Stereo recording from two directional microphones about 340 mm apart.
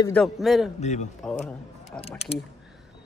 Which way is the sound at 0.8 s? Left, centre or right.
Centre.